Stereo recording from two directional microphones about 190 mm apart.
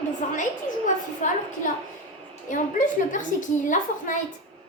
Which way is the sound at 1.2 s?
40° left (ahead or behind).